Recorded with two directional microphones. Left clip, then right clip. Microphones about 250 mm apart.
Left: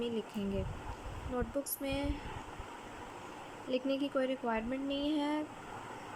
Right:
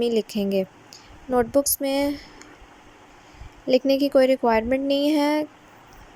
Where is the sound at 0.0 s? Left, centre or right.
Right.